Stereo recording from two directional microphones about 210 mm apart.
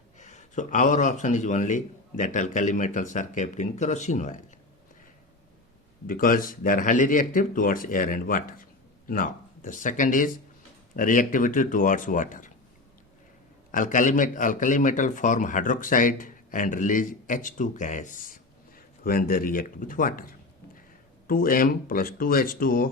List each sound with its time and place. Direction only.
0.2 s a man's voice: 35° left (ahead or behind)
6.1 s a man's voice: 40° left (ahead or behind)
13.7 s a man's voice: 40° left (ahead or behind)